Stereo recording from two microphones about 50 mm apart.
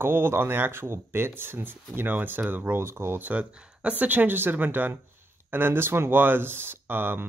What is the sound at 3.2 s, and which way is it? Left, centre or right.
Speech, right.